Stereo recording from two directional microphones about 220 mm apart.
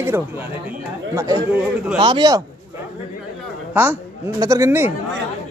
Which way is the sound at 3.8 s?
10° right (ahead or behind).